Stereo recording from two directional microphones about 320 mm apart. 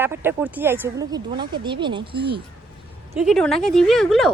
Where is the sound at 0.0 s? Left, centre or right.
Centre.